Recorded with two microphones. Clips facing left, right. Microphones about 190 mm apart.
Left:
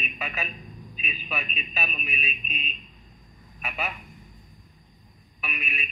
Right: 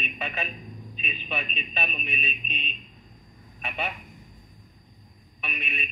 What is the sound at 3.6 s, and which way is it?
Speech, 30° right (ahead or behind).